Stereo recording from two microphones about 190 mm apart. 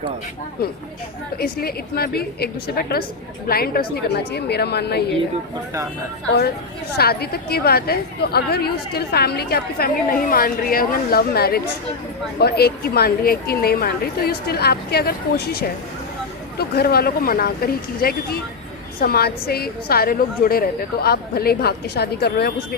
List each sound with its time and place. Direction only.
1.4 s a woman's voice: 55° left (ahead or behind)
6.9 s a woman's voice: 55° left (ahead or behind)